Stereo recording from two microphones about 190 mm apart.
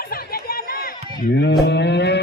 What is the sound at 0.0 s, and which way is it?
Chatter, 55° left (ahead or behind).